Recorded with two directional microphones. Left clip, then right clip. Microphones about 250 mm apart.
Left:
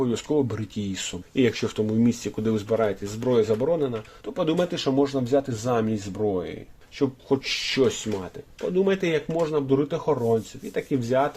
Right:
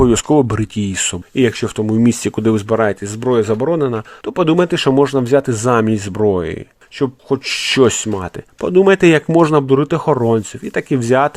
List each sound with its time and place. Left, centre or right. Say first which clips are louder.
0.0 s speech: right 12 dB; right